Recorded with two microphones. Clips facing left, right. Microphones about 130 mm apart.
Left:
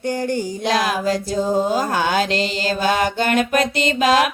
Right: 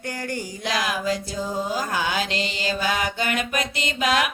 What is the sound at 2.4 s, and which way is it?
Mantra, 30° left (ahead or behind).